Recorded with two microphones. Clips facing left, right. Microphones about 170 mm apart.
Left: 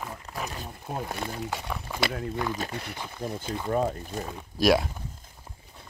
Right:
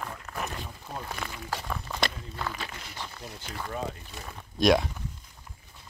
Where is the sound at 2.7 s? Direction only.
60° left (ahead or behind).